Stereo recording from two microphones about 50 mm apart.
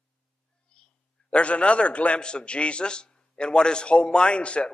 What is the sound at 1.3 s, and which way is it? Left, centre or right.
A man's voice, left.